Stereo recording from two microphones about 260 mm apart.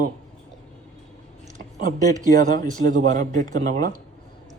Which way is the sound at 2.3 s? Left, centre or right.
Right.